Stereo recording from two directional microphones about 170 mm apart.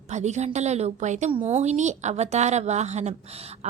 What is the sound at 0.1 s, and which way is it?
A woman's voice, 40° right (ahead or behind).